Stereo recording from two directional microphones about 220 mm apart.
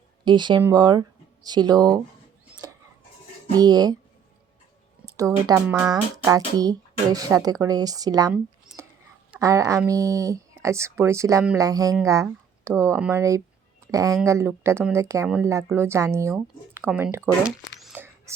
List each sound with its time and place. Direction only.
0.3 s speech: 20° right (ahead or behind)
3.6 s speech: 15° right (ahead or behind)
5.1 s speech: 15° right (ahead or behind)
9.3 s speech: 15° right (ahead or behind)
17.7 s a sound: 5° right (ahead or behind)